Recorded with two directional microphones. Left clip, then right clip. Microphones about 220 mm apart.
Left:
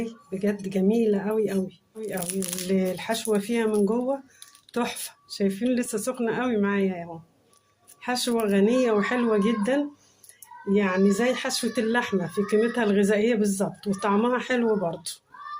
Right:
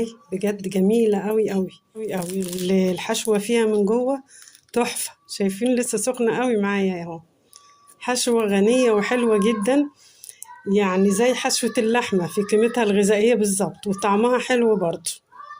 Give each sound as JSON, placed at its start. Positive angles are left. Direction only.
{"t": 0.0, "sound": "speech", "side_deg": -40}